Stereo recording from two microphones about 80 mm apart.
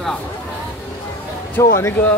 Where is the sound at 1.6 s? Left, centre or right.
Left.